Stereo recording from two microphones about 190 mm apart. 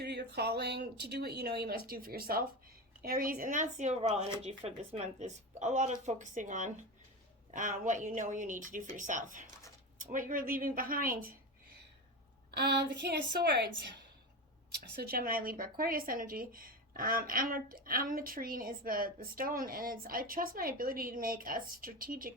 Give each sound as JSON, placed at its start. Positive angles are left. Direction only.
{"t": 0.0, "sound": "a woman's voice", "side_deg": -60}
{"t": 12.5, "sound": "speech", "side_deg": -60}
{"t": 14.7, "sound": "a woman's voice", "side_deg": -60}